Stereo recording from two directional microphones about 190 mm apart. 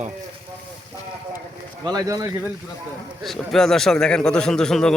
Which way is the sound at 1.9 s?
20° right (ahead or behind).